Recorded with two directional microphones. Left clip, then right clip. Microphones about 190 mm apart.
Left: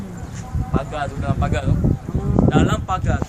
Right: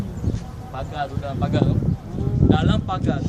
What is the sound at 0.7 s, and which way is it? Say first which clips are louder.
A man's voice: left 3 dB; 5° right (ahead or behind).